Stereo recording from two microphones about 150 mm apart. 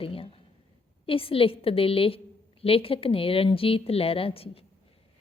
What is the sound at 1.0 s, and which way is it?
A woman's voice, 35° left (ahead or behind).